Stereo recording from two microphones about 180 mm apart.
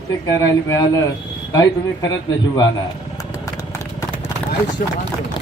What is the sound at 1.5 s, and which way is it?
Speech, 20° left (ahead or behind).